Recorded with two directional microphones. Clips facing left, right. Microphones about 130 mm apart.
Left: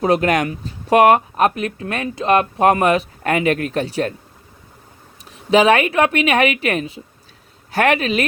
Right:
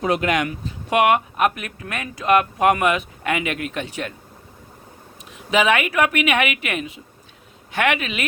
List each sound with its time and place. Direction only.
0.0 s speech: 40° left (ahead or behind)
5.3 s speech: 35° left (ahead or behind)